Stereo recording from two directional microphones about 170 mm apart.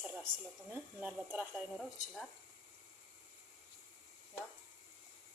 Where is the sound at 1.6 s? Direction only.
Centre (ahead or behind).